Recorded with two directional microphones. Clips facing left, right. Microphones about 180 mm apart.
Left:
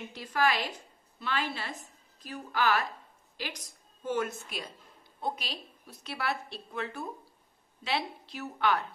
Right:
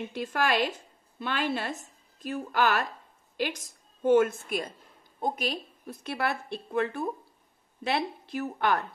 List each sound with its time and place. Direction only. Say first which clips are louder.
0.1 s a woman's voice: right 1 dB; 50° right (ahead or behind)